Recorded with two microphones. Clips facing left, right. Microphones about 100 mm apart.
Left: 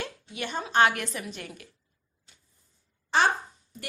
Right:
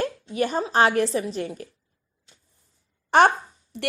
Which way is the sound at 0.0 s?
40° right (ahead or behind).